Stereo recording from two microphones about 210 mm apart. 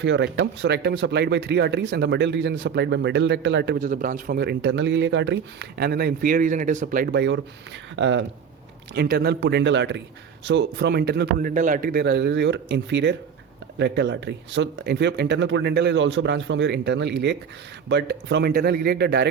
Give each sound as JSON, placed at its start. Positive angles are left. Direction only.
{"t": 0.0, "sound": "speech", "side_deg": -60}
{"t": 7.1, "sound": "speech", "side_deg": -55}